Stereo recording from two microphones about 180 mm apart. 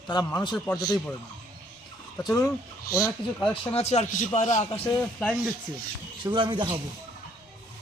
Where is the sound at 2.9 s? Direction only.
15° left (ahead or behind).